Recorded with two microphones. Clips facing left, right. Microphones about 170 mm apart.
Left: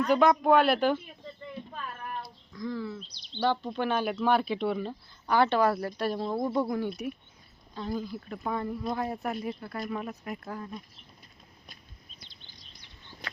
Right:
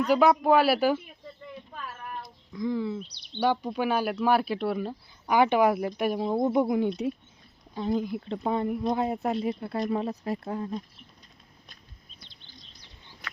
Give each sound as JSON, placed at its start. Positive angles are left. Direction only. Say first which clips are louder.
{"t": 0.0, "sound": "speech", "louder": "right 1 dB", "side_deg": -5}
{"t": 1.7, "sound": "a sound", "louder": "left 1 dB", "side_deg": -5}
{"t": 2.5, "sound": "speech", "louder": "right 6 dB", "side_deg": -20}
{"t": 3.0, "sound": "speech", "louder": "right 4 dB", "side_deg": -60}
{"t": 3.4, "sound": "speech", "louder": "right 2 dB", "side_deg": -10}